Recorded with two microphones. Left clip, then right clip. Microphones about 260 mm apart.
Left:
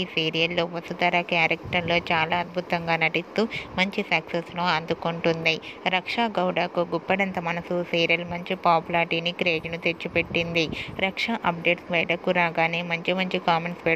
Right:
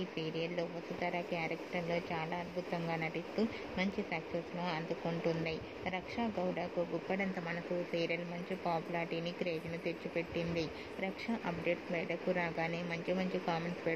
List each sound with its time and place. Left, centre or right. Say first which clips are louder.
0.1 s speech: left 17 dB; left